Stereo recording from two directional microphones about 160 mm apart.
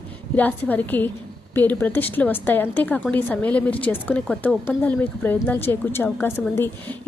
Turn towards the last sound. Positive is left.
turn(degrees=15)  # may be behind; listen again after turning